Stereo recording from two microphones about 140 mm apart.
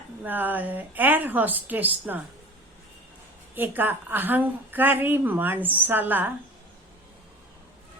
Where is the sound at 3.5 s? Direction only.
15° right (ahead or behind).